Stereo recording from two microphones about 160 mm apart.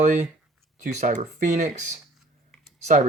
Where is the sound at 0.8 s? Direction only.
55° right (ahead or behind).